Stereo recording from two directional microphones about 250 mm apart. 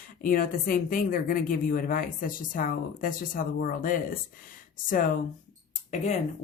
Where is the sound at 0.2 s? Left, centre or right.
Left.